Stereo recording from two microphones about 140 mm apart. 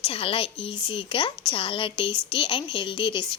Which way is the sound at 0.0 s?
40° left (ahead or behind).